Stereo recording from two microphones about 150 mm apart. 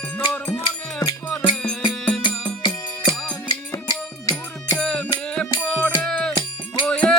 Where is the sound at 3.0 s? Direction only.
5° left (ahead or behind).